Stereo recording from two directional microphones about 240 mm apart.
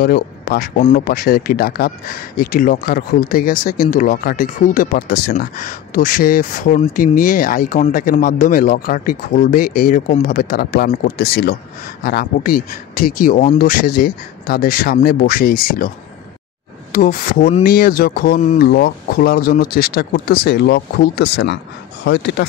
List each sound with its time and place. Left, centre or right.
0.0 s speech: left
16.9 s speech: left